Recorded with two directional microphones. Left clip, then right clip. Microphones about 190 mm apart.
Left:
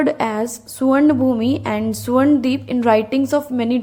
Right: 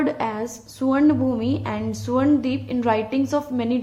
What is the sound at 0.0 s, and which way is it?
A woman's voice, 25° left (ahead or behind).